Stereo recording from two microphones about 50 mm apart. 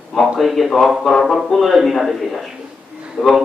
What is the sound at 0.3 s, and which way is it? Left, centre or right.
A man's voice, centre.